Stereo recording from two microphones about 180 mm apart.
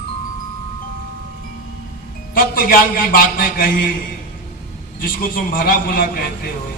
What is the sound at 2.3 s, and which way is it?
A man's voice, 50° left (ahead or behind).